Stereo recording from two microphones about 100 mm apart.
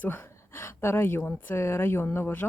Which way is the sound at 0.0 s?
20° left (ahead or behind).